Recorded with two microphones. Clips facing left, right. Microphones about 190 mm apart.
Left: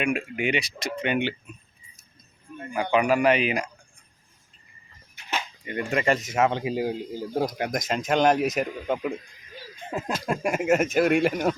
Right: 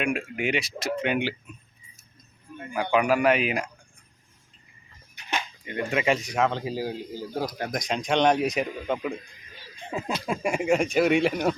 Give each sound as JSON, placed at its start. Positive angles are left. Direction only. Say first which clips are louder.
{"t": 0.0, "sound": "speech", "louder": "left 1 dB", "side_deg": 0}
{"t": 2.9, "sound": "speech", "louder": "left 1 dB", "side_deg": 0}
{"t": 5.6, "sound": "speech", "louder": "left 1 dB", "side_deg": 0}
{"t": 6.5, "sound": "speech", "louder": "left 3 dB", "side_deg": 15}
{"t": 7.7, "sound": "speech", "louder": "left 1 dB", "side_deg": 5}
{"t": 10.2, "sound": "speech", "louder": "left 1 dB", "side_deg": 0}